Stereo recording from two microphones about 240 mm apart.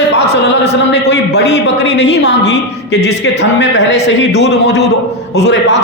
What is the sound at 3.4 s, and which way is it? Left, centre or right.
A man's voice, left.